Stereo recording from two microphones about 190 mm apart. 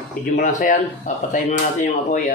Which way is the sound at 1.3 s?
40° left (ahead or behind).